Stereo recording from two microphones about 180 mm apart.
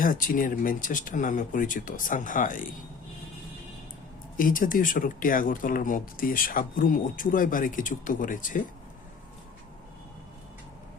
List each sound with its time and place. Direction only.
0.0 s speech: 50° left (ahead or behind)
4.4 s speech: 50° left (ahead or behind)